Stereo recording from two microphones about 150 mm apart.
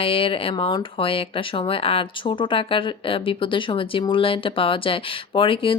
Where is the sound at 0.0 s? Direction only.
40° left (ahead or behind).